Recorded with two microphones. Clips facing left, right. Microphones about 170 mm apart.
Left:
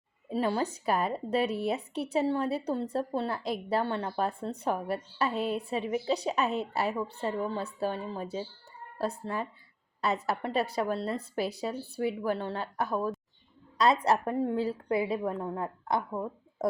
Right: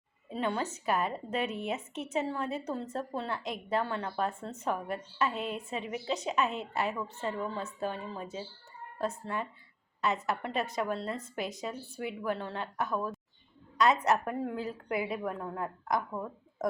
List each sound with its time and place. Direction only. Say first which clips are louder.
0.3 s speech: left 4 dB; 35° left (ahead or behind)